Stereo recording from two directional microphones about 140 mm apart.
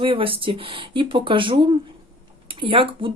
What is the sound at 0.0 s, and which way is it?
Speech, 40° right (ahead or behind).